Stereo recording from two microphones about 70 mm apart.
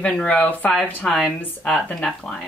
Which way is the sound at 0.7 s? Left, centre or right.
Centre.